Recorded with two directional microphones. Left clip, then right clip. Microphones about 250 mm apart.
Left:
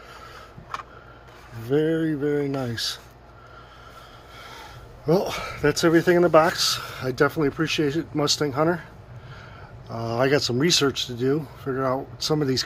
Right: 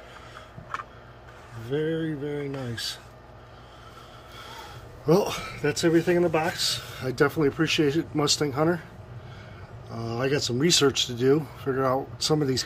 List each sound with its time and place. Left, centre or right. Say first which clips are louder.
1.7 s mantra: left 6 dB; centre
4.4 s a sound: even; centre
5.4 s speech: left 4 dB; centre
9.8 s speech: left 6 dB; centre